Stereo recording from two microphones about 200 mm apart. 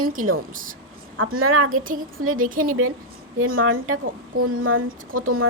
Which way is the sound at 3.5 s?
90° right.